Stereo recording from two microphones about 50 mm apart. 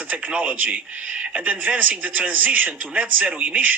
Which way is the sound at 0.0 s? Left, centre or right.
Right.